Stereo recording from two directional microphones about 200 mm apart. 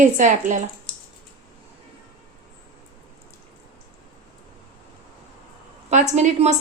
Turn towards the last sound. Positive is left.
turn(degrees=-35)  # may be behind; listen again after turning